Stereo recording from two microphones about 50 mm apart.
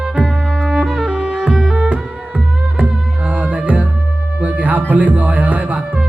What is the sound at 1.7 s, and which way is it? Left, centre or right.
Music, right.